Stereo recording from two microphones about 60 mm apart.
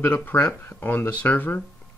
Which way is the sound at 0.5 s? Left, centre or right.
Left.